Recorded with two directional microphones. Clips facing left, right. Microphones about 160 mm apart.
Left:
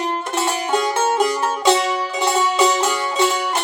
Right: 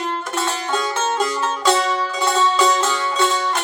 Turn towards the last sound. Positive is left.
turn(degrees=15)  # may be behind; listen again after turning